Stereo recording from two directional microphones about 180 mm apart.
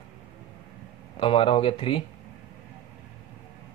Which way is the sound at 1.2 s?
30° left (ahead or behind).